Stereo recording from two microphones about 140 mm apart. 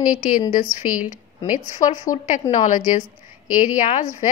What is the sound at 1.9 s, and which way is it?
Speech, 60° left (ahead or behind).